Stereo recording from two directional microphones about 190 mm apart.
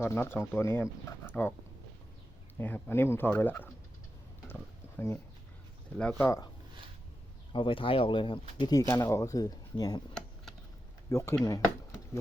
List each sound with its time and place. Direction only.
0.0 s speech: 10° left (ahead or behind)
2.6 s speech: 10° left (ahead or behind)
4.4 s a sound: 10° left (ahead or behind)
6.0 s speech: 5° left (ahead or behind)
7.5 s speech: 25° left (ahead or behind)
11.1 s speech: 15° left (ahead or behind)
11.4 s a sound: 15° left (ahead or behind)